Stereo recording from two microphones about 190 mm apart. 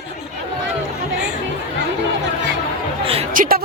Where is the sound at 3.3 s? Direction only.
50° right (ahead or behind).